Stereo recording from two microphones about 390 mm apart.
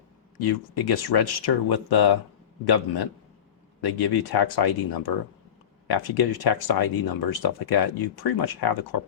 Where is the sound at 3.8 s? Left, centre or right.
Left.